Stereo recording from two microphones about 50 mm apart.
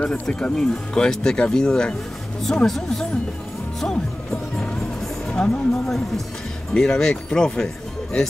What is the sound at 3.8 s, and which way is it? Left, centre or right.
Music, centre.